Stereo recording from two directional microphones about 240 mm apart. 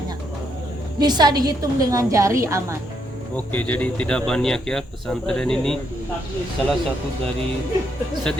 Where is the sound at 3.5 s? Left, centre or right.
Centre.